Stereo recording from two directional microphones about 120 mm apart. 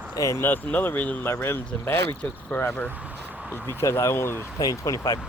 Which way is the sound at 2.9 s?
15° right (ahead or behind).